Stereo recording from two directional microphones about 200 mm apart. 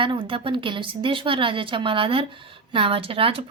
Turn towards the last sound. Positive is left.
turn(degrees=-25)  # may be behind; listen again after turning